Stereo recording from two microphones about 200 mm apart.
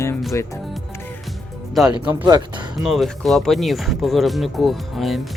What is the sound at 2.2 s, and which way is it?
Speech, 20° right (ahead or behind).